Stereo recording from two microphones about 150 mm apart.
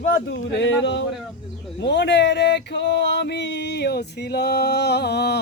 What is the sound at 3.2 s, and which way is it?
Music, 90° left.